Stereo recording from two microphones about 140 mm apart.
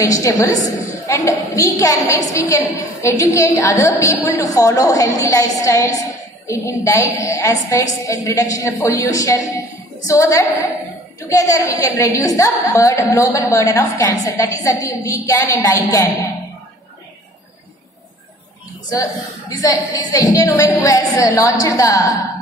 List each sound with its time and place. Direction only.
0.0 s a woman's voice: 25° left (ahead or behind)
19.5 s a woman's voice: 25° left (ahead or behind)